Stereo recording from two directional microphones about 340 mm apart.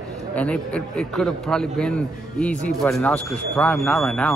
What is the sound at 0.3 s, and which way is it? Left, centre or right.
Speech, centre.